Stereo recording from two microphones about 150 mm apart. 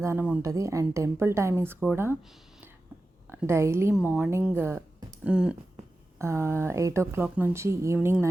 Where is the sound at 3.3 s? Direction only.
15° right (ahead or behind).